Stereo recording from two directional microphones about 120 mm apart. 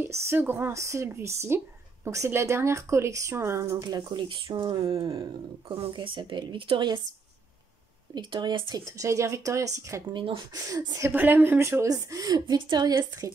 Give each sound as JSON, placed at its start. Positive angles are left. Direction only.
{"t": 0.0, "sound": "a woman's voice", "side_deg": -20}
{"t": 8.1, "sound": "speech", "side_deg": -40}
{"t": 8.8, "sound": "speech", "side_deg": -25}
{"t": 10.1, "sound": "a woman's voice", "side_deg": -45}
{"t": 10.5, "sound": "speech", "side_deg": -30}
{"t": 11.1, "sound": "speech", "side_deg": -15}